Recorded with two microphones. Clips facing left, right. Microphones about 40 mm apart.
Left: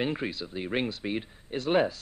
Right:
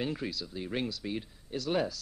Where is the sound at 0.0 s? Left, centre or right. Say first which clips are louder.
Left 4 dB; left.